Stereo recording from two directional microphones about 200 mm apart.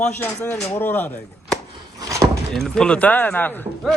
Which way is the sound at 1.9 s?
15° right (ahead or behind).